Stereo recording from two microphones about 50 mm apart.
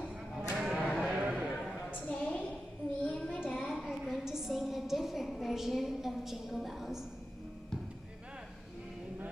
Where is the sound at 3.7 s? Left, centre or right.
Centre.